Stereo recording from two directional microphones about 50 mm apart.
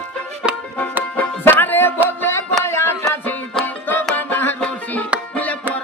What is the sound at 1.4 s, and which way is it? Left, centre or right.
Music, left.